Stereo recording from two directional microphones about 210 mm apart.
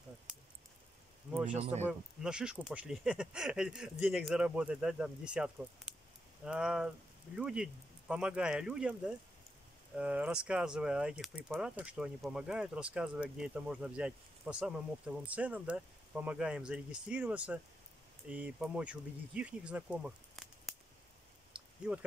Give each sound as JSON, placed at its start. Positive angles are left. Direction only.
{"t": 0.3, "sound": "a sound", "side_deg": -5}
{"t": 1.3, "sound": "speech", "side_deg": -5}
{"t": 1.6, "sound": "speech", "side_deg": -30}
{"t": 1.9, "sound": "speech", "side_deg": -5}
{"t": 21.8, "sound": "speech", "side_deg": -5}